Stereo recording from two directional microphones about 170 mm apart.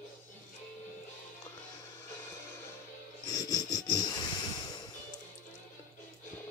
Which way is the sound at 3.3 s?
20° left (ahead or behind).